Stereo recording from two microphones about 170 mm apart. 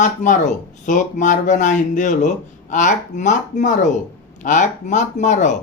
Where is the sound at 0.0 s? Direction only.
45° left (ahead or behind).